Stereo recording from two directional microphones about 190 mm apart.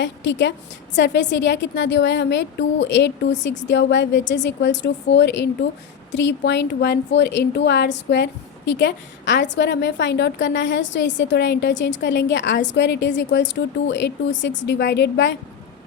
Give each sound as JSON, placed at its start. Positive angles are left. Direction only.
{"t": 0.0, "sound": "a woman's voice", "side_deg": 70}